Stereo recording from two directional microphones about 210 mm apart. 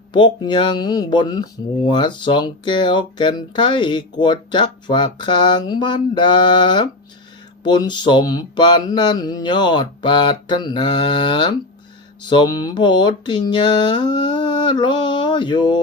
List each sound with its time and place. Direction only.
0.1 s speech: 20° left (ahead or behind)